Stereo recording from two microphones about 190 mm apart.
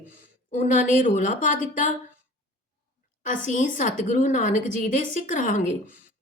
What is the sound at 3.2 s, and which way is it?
A woman's voice, 40° left (ahead or behind).